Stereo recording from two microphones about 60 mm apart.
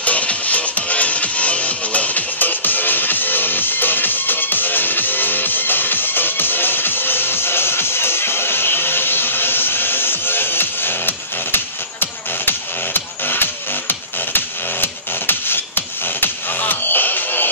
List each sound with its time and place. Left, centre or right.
0.0 s music: left